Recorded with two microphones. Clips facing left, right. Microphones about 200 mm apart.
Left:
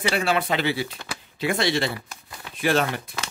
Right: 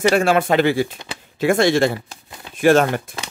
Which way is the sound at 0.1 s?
50° right (ahead or behind).